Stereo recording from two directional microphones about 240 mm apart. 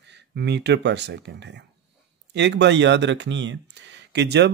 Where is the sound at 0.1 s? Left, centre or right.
Right.